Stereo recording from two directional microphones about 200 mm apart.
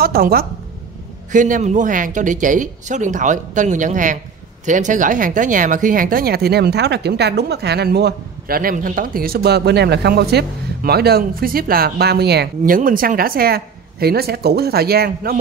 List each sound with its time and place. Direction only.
0.0 s speech: 50° right (ahead or behind)